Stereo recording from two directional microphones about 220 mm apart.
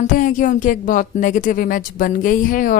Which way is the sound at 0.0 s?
35° left (ahead or behind).